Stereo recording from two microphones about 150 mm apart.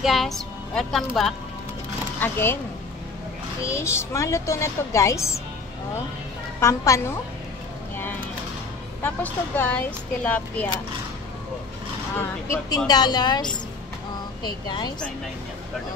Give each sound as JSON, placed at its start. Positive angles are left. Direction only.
{"t": 0.0, "sound": "speech", "side_deg": 0}
{"t": 2.1, "sound": "speech", "side_deg": 15}
{"t": 3.6, "sound": "a child's voice", "side_deg": 20}
{"t": 6.6, "sound": "a child's voice", "side_deg": 20}
{"t": 9.0, "sound": "speech", "side_deg": 10}
{"t": 12.2, "sound": "a child's voice", "side_deg": 20}